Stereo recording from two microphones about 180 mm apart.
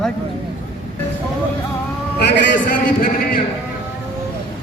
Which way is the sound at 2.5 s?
50° left (ahead or behind).